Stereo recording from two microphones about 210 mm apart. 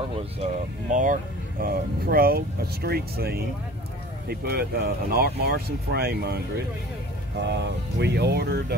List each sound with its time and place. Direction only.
0.2 s speech: 30° right (ahead or behind); by 6.6 s 50° right (ahead or behind)
8.0 s speech: 50° right (ahead or behind)